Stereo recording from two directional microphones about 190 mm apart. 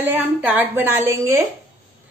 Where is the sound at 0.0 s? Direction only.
10° right (ahead or behind).